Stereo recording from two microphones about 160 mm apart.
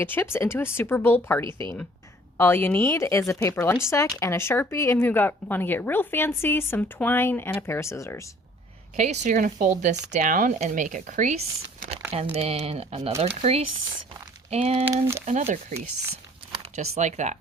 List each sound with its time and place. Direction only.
0.0 s speech: 15° left (ahead or behind)
1.5 s speech: 30° right (ahead or behind)
2.4 s speech: 15° left (ahead or behind)
9.0 s speech: 45° right (ahead or behind)
16.7 s speech: 45° right (ahead or behind)